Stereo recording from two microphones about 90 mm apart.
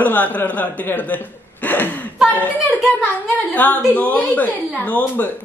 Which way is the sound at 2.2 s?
20° left (ahead or behind).